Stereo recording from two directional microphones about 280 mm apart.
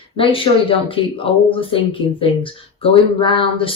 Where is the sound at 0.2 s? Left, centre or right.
Centre.